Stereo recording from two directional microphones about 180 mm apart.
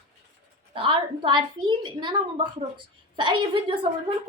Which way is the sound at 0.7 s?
30° right (ahead or behind).